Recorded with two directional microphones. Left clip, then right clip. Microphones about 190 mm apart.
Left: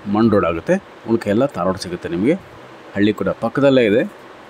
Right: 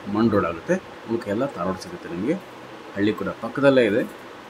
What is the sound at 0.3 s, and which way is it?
Speech, 40° left (ahead or behind).